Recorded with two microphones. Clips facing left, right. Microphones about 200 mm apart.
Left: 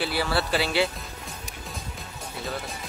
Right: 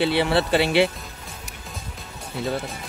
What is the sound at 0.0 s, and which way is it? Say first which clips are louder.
Speech: right 6 dB; 25° right (ahead or behind).